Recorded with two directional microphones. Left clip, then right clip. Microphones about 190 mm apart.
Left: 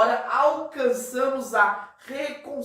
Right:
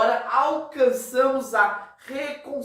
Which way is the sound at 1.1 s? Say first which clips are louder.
Right 3 dB; 10° right (ahead or behind).